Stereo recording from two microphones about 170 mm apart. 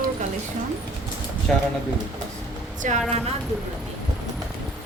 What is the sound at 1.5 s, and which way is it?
Speech, 5° left (ahead or behind).